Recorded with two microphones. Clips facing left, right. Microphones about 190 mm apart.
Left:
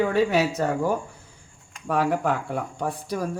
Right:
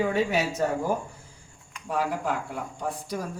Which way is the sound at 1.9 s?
60° left (ahead or behind).